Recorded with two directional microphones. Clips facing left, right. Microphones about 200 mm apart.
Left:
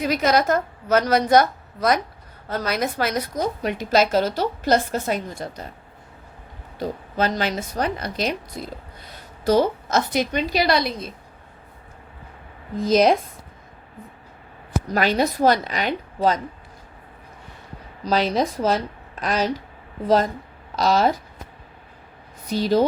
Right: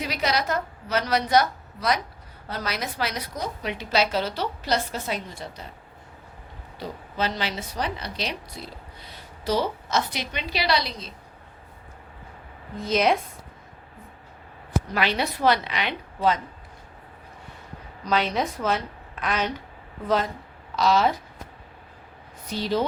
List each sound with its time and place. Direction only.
0.0 s a woman's voice: 45° left (ahead or behind)
6.7 s a woman's voice: 45° left (ahead or behind)
12.8 s speech: 40° left (ahead or behind)
14.9 s a woman's voice: 45° left (ahead or behind)
18.0 s a woman's voice: 35° left (ahead or behind)
22.4 s speech: 40° left (ahead or behind)